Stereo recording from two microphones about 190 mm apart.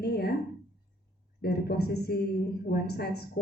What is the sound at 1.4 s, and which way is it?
A woman's voice, 55° left (ahead or behind).